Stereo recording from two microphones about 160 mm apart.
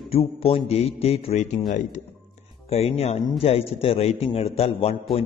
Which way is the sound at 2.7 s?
40° left (ahead or behind).